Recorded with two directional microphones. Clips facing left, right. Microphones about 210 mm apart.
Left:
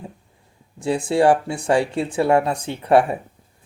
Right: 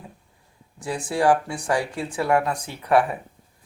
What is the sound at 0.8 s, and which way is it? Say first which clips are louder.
Speech: left 6 dB; 25° left (ahead or behind).